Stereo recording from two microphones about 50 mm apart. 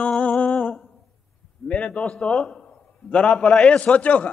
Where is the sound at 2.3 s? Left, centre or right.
Centre.